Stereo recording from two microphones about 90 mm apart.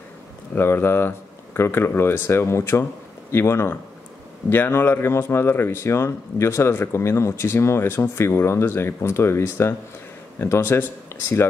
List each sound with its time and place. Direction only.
0.6 s speech: 25° left (ahead or behind)